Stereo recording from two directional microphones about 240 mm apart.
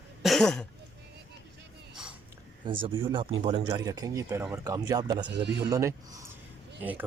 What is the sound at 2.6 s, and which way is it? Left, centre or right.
Speech, right.